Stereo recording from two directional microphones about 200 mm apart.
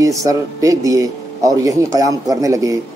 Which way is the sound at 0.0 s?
15° right (ahead or behind).